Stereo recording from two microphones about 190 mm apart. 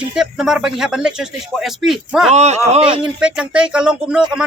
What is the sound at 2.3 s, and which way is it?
Speech, 35° right (ahead or behind).